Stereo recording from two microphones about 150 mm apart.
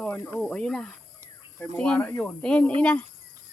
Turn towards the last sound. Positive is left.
turn(degrees=10)  # may be behind; listen again after turning